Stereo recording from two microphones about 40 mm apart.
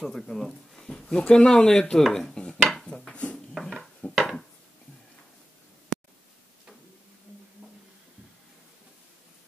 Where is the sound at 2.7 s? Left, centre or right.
Centre.